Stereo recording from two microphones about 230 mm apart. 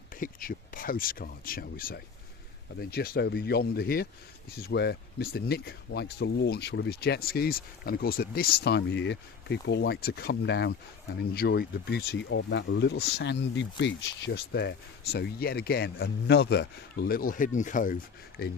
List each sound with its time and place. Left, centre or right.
0.2 s speech: left